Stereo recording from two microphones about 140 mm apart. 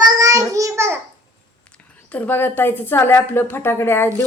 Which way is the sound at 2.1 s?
15° left (ahead or behind).